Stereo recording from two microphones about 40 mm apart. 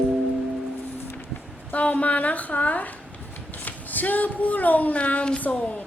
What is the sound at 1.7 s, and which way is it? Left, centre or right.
Speech, left.